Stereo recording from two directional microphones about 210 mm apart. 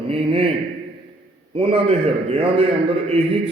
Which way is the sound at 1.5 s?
25° right (ahead or behind).